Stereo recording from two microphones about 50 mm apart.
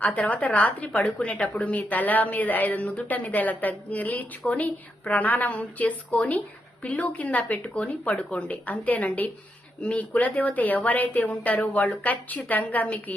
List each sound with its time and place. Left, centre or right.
0.0 s a woman's voice: left